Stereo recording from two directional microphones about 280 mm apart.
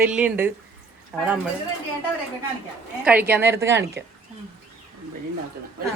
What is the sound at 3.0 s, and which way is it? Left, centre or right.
Speech, centre.